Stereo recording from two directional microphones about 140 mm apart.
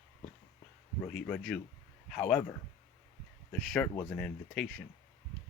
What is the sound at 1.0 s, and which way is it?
A man's voice, 5° left (ahead or behind).